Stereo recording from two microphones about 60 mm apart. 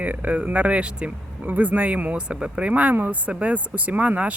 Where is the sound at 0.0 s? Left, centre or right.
Right.